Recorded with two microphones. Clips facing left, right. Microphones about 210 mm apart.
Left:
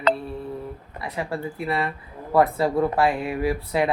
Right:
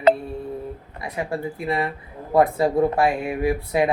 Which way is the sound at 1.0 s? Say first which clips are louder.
Right 2 dB; 20° right (ahead or behind).